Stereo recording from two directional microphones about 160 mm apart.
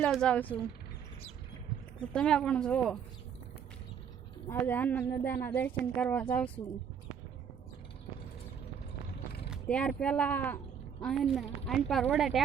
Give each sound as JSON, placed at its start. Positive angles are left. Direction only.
{"t": 0.0, "sound": "speech", "side_deg": 5}
{"t": 2.0, "sound": "a woman's voice", "side_deg": 5}
{"t": 4.4, "sound": "speech", "side_deg": 10}
{"t": 6.6, "sound": "speech", "side_deg": 30}
{"t": 9.6, "sound": "speech", "side_deg": 5}
{"t": 11.0, "sound": "a woman's voice", "side_deg": 0}